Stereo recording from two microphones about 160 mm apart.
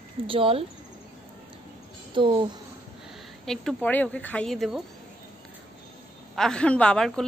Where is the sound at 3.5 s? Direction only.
5° left (ahead or behind).